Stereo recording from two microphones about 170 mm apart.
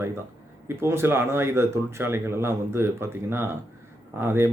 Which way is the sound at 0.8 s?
15° right (ahead or behind).